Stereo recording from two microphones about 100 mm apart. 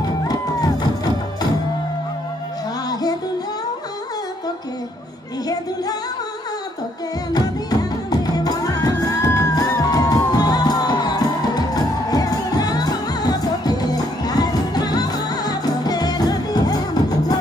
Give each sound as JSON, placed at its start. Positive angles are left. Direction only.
{"t": 0.2, "sound": "music", "side_deg": 40}
{"t": 2.9, "sound": "music", "side_deg": 40}
{"t": 7.3, "sound": "music", "side_deg": 40}